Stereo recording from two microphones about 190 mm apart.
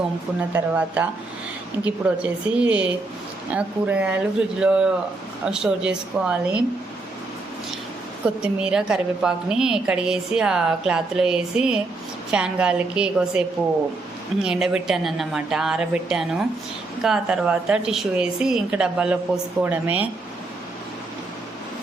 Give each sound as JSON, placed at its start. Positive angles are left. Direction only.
{"t": 0.3, "sound": "a woman's voice", "side_deg": -10}
{"t": 8.2, "sound": "a woman's voice", "side_deg": -5}
{"t": 14.4, "sound": "a woman's voice", "side_deg": -5}